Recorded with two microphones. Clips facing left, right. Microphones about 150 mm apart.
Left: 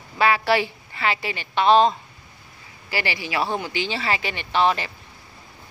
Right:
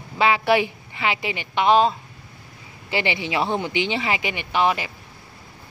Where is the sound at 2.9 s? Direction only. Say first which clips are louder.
Right 3 dB; 20° right (ahead or behind).